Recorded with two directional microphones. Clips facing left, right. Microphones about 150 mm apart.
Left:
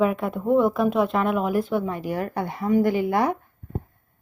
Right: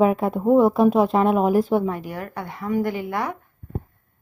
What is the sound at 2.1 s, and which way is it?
Speech, 30° left (ahead or behind).